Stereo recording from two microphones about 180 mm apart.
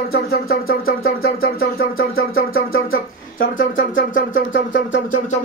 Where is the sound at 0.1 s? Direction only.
60° left (ahead or behind).